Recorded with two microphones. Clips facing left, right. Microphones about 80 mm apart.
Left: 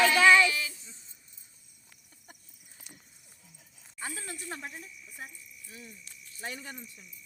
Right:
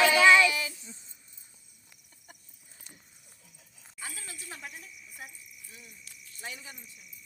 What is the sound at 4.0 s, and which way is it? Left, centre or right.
Speech, left.